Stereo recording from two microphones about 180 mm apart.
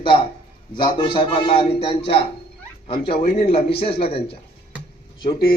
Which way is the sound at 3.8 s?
30° left (ahead or behind).